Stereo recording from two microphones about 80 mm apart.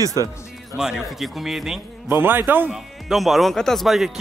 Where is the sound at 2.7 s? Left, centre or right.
Centre.